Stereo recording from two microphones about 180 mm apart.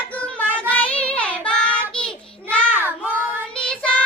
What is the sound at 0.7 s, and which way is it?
Child singing, 5° left (ahead or behind).